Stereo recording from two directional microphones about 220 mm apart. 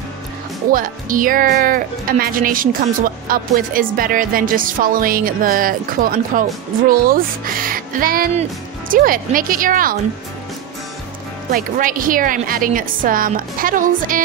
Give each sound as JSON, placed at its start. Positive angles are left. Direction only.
{"t": 0.7, "sound": "speech", "side_deg": -40}
{"t": 11.5, "sound": "speech", "side_deg": -40}